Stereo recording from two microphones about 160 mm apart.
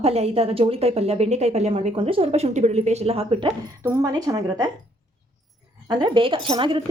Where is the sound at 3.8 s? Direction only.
20° right (ahead or behind).